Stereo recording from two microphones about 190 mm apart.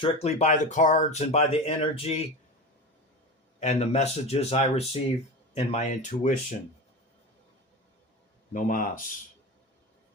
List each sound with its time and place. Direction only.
0.0 s speech: 35° left (ahead or behind)
3.6 s speech: 40° left (ahead or behind)
8.5 s speech: 45° left (ahead or behind)